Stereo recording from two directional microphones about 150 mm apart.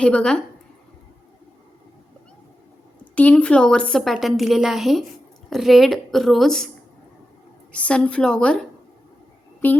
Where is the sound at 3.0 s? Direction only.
10° left (ahead or behind).